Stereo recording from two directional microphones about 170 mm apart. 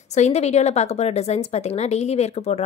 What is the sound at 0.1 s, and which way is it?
A woman's voice, 40° left (ahead or behind).